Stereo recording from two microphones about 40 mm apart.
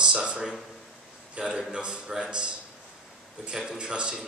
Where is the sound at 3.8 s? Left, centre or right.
Right.